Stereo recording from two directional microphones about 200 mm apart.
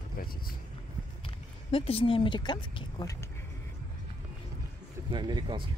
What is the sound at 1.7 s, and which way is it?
Speech, 30° left (ahead or behind).